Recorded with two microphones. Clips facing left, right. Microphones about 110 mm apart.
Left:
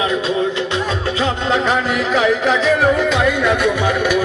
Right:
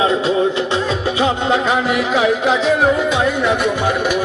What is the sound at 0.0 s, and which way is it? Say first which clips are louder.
Music: right 3 dB; 25° right (ahead or behind).